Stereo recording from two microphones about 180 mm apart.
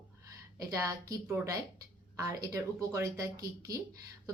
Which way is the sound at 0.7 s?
20° right (ahead or behind).